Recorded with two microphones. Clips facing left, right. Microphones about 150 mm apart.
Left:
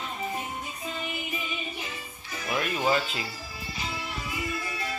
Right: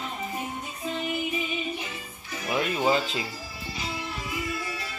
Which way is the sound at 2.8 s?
20° right (ahead or behind).